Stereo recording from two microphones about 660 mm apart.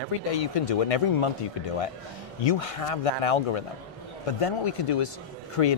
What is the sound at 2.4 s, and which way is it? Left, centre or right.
Speech, left.